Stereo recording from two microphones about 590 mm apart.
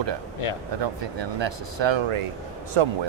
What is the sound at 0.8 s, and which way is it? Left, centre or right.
Speech, right.